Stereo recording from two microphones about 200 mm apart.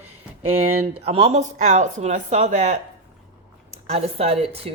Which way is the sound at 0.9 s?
30° right (ahead or behind).